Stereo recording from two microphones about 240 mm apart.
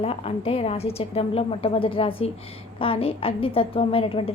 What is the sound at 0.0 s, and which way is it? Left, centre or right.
A woman's voice, left.